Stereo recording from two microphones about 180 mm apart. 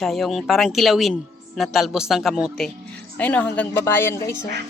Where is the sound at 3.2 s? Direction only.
10° left (ahead or behind).